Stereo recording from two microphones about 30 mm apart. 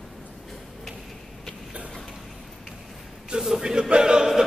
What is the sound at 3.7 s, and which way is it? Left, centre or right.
Choir, right.